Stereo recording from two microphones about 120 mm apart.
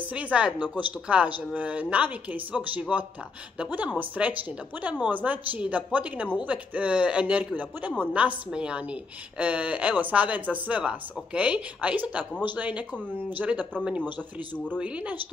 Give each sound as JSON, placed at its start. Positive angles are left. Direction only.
{"t": 0.0, "sound": "a woman's voice", "side_deg": -10}
{"t": 0.6, "sound": "speech", "side_deg": 40}
{"t": 1.0, "sound": "a woman's voice", "side_deg": -10}